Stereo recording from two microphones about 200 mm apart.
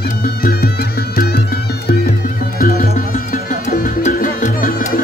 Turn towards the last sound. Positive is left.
turn(degrees=45)  # may be behind; listen again after turning